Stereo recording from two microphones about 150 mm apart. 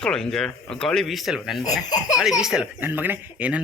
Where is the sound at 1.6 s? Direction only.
25° left (ahead or behind).